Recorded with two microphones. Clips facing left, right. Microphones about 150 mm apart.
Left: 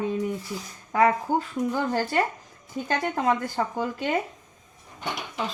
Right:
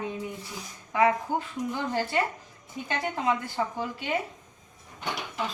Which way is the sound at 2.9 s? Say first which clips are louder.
Left 3 dB; 45° left (ahead or behind).